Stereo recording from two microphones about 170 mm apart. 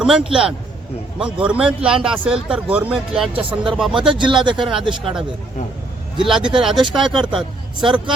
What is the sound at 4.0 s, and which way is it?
Speech, 30° right (ahead or behind).